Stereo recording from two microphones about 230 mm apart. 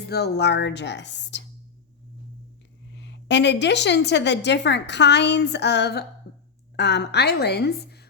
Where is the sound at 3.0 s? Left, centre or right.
Left.